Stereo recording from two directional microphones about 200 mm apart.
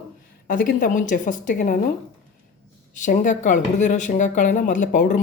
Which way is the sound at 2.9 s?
40° left (ahead or behind).